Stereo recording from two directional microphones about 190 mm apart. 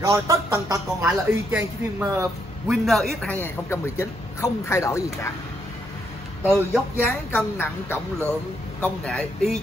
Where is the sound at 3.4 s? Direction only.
15° left (ahead or behind).